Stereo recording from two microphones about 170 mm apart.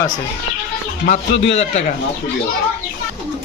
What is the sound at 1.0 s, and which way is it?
Speech, 60° left (ahead or behind).